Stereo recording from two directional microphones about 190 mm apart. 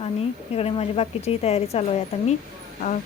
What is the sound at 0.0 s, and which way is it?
Speech, 30° left (ahead or behind).